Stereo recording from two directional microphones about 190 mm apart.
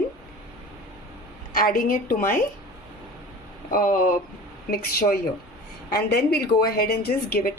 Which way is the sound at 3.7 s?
45° left (ahead or behind).